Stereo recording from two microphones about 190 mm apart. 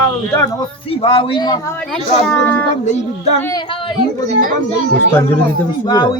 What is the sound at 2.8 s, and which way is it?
Speech, 35° left (ahead or behind).